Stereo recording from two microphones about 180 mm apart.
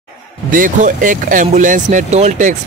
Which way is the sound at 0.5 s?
45° right (ahead or behind).